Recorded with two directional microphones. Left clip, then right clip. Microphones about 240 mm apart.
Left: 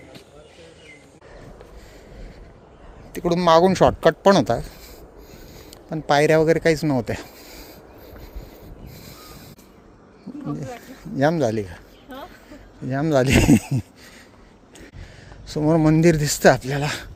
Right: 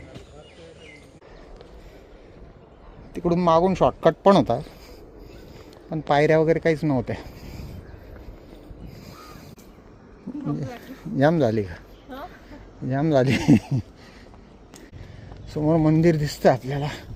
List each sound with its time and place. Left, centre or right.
3.1 s speech: centre
5.9 s speech: centre
10.4 s speech: centre
12.0 s a sound: left
12.8 s speech: centre
15.4 s speech: centre